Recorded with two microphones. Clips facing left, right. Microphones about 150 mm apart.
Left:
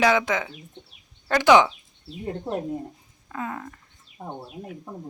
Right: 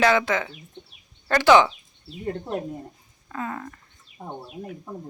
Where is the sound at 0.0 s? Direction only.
15° left (ahead or behind).